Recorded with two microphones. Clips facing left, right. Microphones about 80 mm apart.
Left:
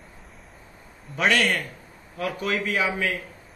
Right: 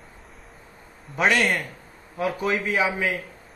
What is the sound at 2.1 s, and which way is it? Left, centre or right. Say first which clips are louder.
Speech: right 3 dB; centre.